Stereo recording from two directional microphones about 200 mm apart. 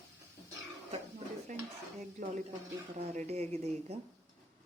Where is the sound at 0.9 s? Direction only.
40° right (ahead or behind).